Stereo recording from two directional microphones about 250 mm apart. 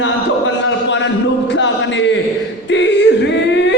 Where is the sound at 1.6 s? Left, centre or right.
Left.